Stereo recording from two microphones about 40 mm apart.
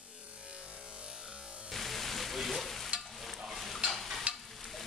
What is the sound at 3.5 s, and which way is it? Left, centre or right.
Stir, centre.